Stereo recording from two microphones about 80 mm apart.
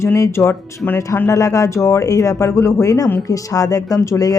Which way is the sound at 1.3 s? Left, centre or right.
Left.